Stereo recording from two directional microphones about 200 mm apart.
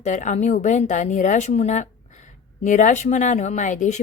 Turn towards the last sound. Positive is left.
turn(degrees=35)  # may be behind; listen again after turning